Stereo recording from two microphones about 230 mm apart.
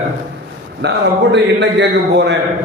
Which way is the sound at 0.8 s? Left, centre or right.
Right.